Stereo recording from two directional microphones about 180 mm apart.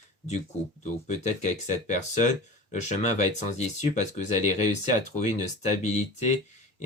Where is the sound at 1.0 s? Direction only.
40° left (ahead or behind).